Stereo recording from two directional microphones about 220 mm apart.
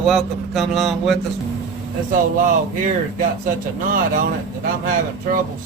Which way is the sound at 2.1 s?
35° right (ahead or behind).